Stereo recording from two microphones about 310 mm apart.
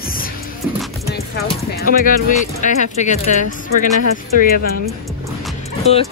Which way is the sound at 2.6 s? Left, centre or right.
Left.